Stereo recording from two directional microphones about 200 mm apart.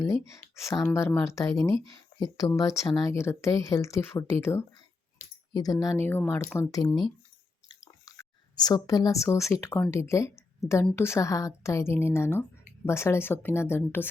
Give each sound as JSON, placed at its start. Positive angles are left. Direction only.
{"t": 0.0, "sound": "speech", "side_deg": 15}
{"t": 2.1, "sound": "a sound", "side_deg": 55}
{"t": 2.6, "sound": "speech", "side_deg": 15}
{"t": 8.0, "sound": "a woman's voice", "side_deg": 20}